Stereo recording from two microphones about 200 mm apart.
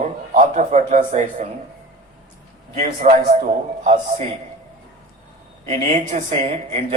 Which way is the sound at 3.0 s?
35° right (ahead or behind).